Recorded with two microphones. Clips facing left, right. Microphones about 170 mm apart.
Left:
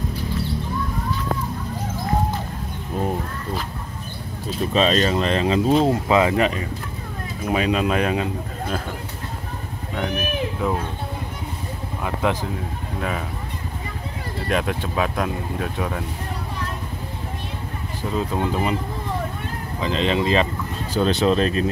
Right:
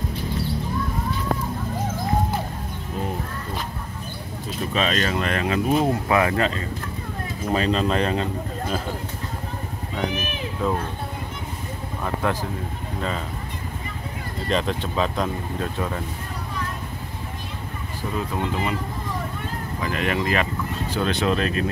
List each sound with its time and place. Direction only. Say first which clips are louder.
4.7 s speech: left 5 dB; 30° left (ahead or behind); by 8.3 s 10° left (ahead or behind)
12.0 s speech: left 2 dB; 15° left (ahead or behind)
14.5 s speech: left 1 dB; 10° left (ahead or behind)
18.1 s speech: left 3 dB; 25° left (ahead or behind)
19.8 s speech: left 4 dB; 25° left (ahead or behind)